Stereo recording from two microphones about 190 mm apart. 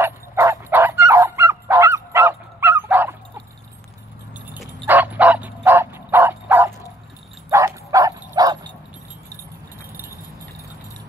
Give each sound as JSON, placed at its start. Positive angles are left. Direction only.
{"t": 0.0, "sound": "bow-wow", "side_deg": -10}
{"t": 4.5, "sound": "bow-wow", "side_deg": -5}